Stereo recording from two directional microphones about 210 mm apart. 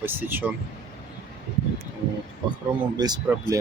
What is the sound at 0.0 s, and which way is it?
Speech, 10° right (ahead or behind).